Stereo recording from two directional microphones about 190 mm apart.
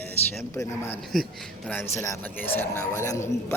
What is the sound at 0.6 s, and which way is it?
Speech, 15° left (ahead or behind).